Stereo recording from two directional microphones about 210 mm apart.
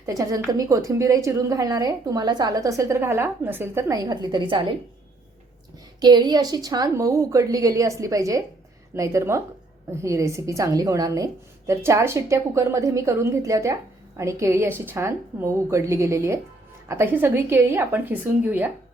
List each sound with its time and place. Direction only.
0.0 s a woman's voice: 15° right (ahead or behind)
6.0 s a woman's voice: 20° right (ahead or behind)